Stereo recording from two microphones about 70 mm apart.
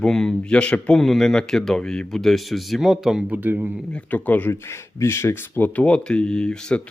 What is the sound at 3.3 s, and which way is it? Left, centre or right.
Speech, right.